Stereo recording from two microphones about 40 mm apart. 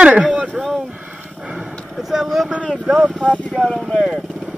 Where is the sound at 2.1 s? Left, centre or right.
Centre.